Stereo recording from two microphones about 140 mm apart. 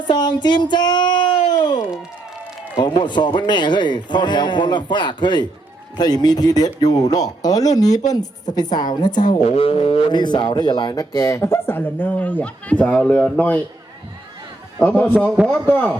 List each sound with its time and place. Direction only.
0.1 s a sound: 30° left (ahead or behind)
2.7 s speech: 30° left (ahead or behind)
9.4 s speech: 45° left (ahead or behind); by 13.3 s 5° left (ahead or behind)
14.8 s a man's voice: 10° left (ahead or behind)
15.4 s speech: 5° right (ahead or behind)